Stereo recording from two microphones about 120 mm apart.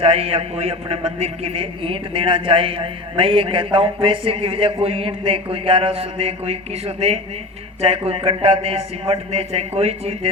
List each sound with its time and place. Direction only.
0.0 s a man's voice: 55° right (ahead or behind)